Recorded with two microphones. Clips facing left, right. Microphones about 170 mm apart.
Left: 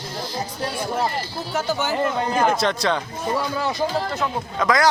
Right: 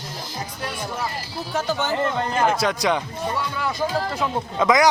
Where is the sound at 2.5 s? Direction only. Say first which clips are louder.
Even; 10° right (ahead or behind).